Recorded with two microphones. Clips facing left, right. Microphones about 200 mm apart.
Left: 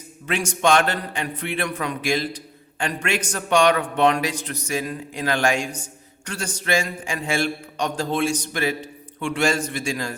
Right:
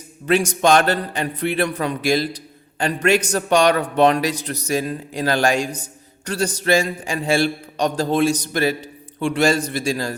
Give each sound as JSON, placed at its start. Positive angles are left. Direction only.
{"t": 0.3, "sound": "a man's voice", "side_deg": -35}